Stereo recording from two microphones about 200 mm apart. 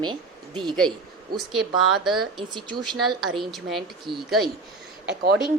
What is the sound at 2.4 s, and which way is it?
Speech, 20° right (ahead or behind).